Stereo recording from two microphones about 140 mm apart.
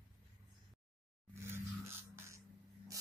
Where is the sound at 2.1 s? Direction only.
20° right (ahead or behind).